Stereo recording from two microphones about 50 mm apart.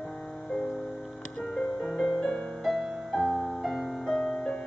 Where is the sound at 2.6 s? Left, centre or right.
Centre.